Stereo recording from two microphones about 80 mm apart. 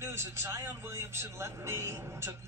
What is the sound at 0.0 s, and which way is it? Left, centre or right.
A man's voice, right.